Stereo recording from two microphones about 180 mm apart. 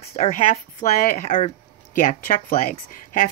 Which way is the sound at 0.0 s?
35° left (ahead or behind).